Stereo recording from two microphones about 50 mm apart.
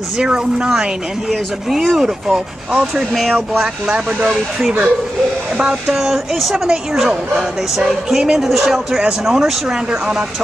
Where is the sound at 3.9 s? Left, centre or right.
Right.